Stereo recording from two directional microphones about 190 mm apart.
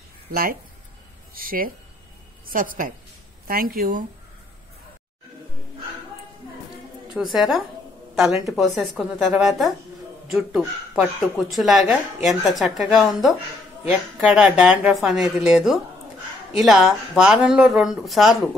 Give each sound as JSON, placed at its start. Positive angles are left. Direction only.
{"t": 0.3, "sound": "a woman's voice", "side_deg": -50}
{"t": 7.2, "sound": "speech", "side_deg": 0}